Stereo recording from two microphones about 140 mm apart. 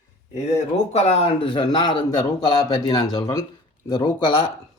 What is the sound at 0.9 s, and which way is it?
Speech, 50° left (ahead or behind).